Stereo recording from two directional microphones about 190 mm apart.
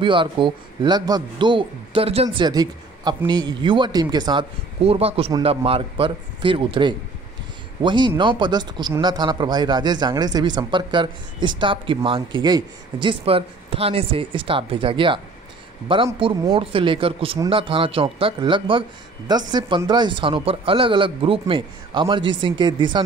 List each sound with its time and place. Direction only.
0.0 s a man's voice: 25° right (ahead or behind)